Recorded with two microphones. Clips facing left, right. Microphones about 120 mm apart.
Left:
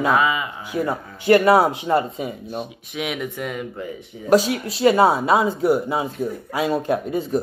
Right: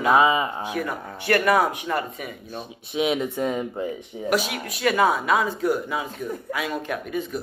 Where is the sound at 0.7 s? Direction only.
25° left (ahead or behind).